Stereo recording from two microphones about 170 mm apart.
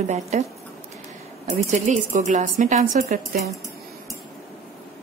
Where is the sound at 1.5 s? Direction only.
45° right (ahead or behind).